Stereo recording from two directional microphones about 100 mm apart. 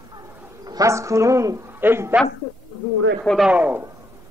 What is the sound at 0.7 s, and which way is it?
A man's voice, 35° right (ahead or behind).